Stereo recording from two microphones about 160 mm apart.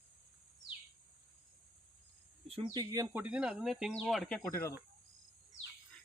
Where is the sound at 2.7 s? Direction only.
20° right (ahead or behind).